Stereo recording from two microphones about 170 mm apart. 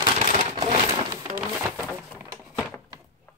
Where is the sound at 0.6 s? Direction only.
25° right (ahead or behind).